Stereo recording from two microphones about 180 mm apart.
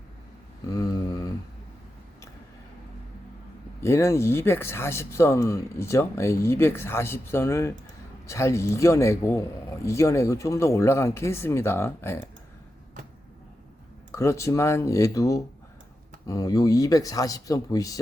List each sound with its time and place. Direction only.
0.8 s mantra: 20° left (ahead or behind)
3.8 s speech: 15° left (ahead or behind)
14.1 s speech: 15° left (ahead or behind)